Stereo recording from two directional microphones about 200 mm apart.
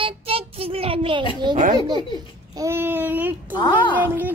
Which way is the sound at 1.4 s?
20° right (ahead or behind).